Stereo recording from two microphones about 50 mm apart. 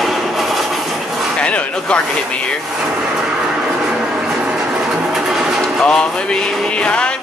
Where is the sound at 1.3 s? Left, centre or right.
Left.